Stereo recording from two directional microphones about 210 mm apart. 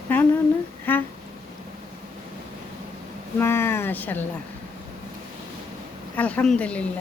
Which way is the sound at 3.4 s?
10° left (ahead or behind).